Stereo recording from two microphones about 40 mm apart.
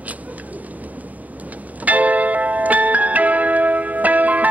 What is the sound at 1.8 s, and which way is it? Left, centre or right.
Music, right.